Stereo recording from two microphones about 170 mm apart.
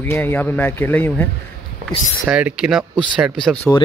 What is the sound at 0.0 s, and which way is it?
Speech, 10° left (ahead or behind).